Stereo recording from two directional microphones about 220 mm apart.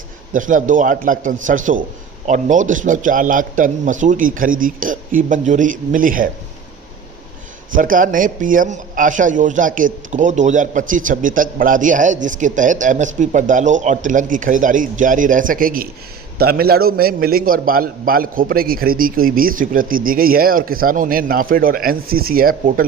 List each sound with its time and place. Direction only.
0.3 s a man's voice: 35° right (ahead or behind)
7.7 s a man's voice: 40° right (ahead or behind)